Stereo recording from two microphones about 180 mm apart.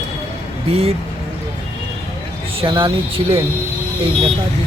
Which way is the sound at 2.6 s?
30° right (ahead or behind).